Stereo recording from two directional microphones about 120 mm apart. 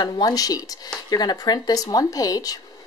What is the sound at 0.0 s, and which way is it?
Speech, 30° left (ahead or behind).